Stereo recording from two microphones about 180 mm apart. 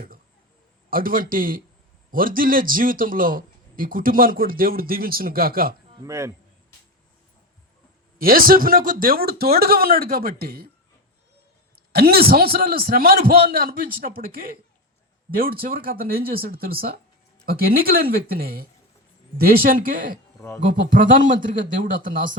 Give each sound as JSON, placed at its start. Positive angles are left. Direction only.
{"t": 0.9, "sound": "a man's voice", "side_deg": -50}
{"t": 6.1, "sound": "a man's voice", "side_deg": -15}
{"t": 8.2, "sound": "a man's voice", "side_deg": -55}
{"t": 11.9, "sound": "a man's voice", "side_deg": -60}